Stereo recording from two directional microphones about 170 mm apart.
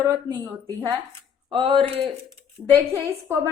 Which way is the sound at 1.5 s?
30° right (ahead or behind).